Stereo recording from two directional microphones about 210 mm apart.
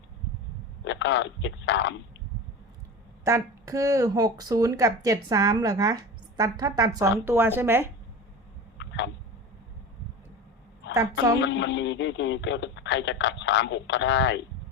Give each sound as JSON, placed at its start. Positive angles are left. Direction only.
{"t": 0.9, "sound": "speech", "side_deg": 60}
{"t": 3.2, "sound": "speech", "side_deg": -15}
{"t": 8.8, "sound": "tick-tock", "side_deg": 60}
{"t": 10.8, "sound": "a sound", "side_deg": 60}
{"t": 11.3, "sound": "speech", "side_deg": 60}